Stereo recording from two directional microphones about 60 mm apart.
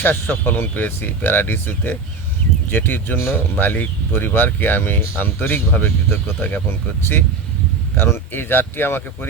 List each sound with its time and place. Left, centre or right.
0.0 s speech: left